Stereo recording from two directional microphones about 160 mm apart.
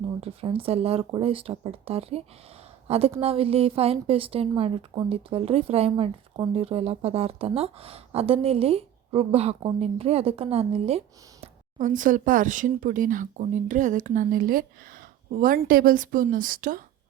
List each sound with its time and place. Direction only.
0.2 s a woman's voice: 35° right (ahead or behind); by 16.8 s 60° right (ahead or behind)